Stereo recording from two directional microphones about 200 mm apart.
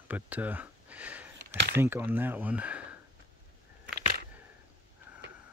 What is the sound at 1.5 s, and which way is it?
Speech, 60° right (ahead or behind).